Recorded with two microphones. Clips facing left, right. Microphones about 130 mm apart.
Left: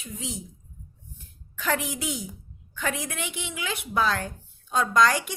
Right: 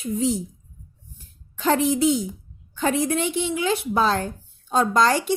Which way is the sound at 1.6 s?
30° right (ahead or behind).